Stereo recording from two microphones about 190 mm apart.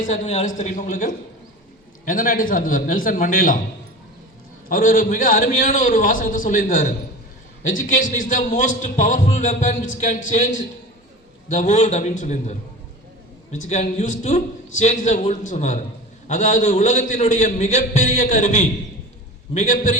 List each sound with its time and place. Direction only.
0.0 s a man's voice: 35° left (ahead or behind)
4.7 s a man's voice: 45° left (ahead or behind)
13.7 s a man's voice: 40° left (ahead or behind)